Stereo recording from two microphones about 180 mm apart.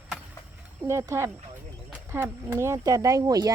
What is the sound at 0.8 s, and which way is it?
Speech, 15° right (ahead or behind).